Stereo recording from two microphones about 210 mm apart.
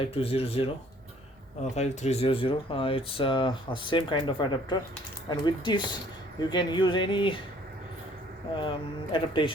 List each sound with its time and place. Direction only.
0.0 s speech: 25° left (ahead or behind)
1.7 s speech: 30° left (ahead or behind)
8.5 s speech: 25° left (ahead or behind)